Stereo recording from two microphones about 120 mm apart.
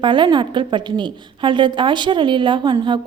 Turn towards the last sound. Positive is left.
turn(degrees=-40)  # may be behind; listen again after turning